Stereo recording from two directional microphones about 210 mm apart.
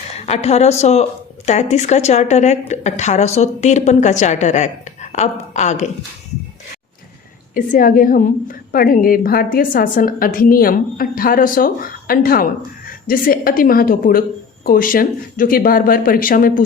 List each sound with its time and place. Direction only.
0.3 s a woman's voice: 30° left (ahead or behind)
7.5 s a woman's voice: 40° left (ahead or behind)